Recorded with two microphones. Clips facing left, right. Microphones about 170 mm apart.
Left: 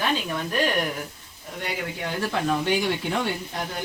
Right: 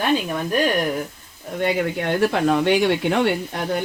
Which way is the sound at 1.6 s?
65° right (ahead or behind).